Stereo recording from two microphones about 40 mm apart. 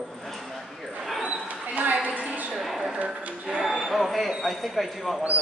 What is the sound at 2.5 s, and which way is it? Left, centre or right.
Speech, centre.